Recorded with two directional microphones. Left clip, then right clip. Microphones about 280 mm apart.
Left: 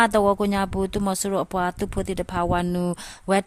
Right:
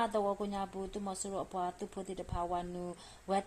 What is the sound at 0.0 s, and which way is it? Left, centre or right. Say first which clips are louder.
Speech: left 15 dB; left.